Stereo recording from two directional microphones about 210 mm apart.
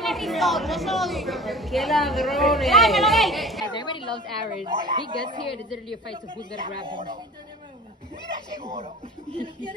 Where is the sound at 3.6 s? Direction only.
20° left (ahead or behind).